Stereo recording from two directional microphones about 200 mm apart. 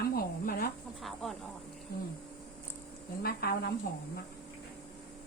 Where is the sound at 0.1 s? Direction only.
50° left (ahead or behind).